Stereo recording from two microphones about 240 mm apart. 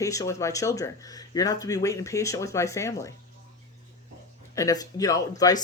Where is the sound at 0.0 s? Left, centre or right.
Centre.